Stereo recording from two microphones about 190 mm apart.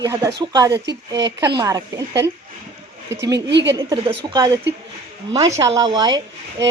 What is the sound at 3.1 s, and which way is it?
Speech, 20° right (ahead or behind).